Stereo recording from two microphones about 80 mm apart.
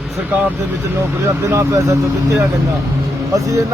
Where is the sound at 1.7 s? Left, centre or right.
Right.